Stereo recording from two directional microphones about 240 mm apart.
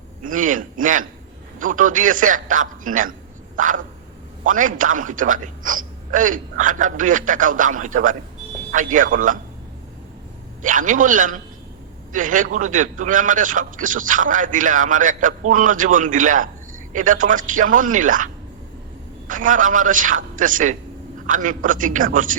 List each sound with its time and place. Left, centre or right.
0.2 s a man's voice: right
10.6 s a man's voice: right
19.3 s a man's voice: right